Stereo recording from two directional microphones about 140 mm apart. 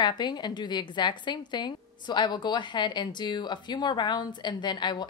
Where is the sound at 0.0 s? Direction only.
30° left (ahead or behind).